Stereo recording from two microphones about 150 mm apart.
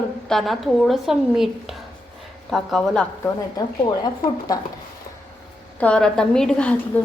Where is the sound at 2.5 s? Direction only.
Centre (ahead or behind).